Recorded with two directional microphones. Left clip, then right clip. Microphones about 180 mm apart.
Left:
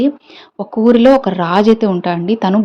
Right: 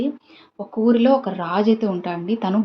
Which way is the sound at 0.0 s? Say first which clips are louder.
Left 10 dB; 45° left (ahead or behind).